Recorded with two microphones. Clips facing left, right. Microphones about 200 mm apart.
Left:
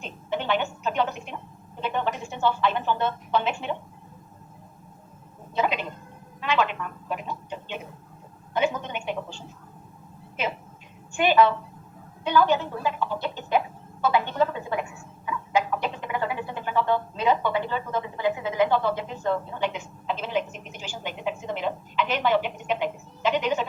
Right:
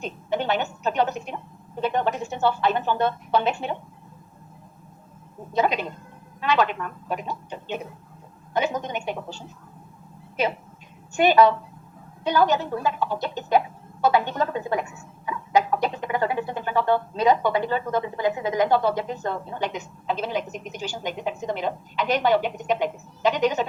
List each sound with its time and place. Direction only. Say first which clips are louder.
0.0 s a woman's voice: right 4 dB; 40° right (ahead or behind)
5.5 s a woman's voice: right 3 dB; 40° right (ahead or behind)
11.1 s speech: right 3 dB; 40° right (ahead or behind)